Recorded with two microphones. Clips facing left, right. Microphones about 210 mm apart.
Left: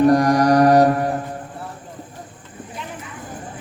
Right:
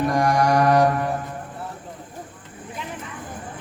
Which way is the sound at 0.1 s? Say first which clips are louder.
Left 5 dB; 35° left (ahead or behind).